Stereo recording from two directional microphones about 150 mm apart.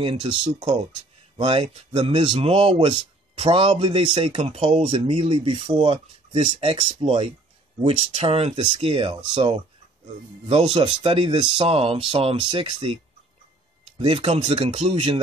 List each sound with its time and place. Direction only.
0.0 s speech: 35° right (ahead or behind)